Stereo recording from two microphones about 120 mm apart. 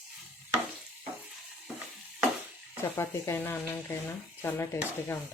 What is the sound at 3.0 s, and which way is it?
Speech, 20° left (ahead or behind).